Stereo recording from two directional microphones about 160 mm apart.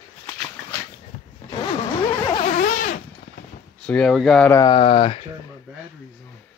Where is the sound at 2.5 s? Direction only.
55° left (ahead or behind).